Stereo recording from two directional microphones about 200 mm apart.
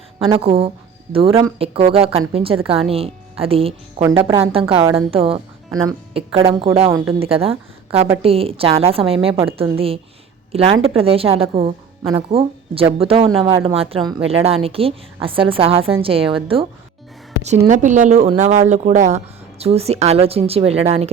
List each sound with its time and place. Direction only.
0.2 s a woman's voice: 30° right (ahead or behind)
17.4 s speech: 35° right (ahead or behind)